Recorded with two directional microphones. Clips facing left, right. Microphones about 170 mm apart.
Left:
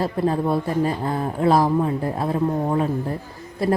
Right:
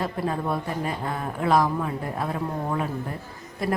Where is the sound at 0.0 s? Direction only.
30° left (ahead or behind).